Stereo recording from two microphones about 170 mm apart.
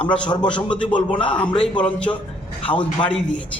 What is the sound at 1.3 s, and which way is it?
A man's voice, 5° left (ahead or behind).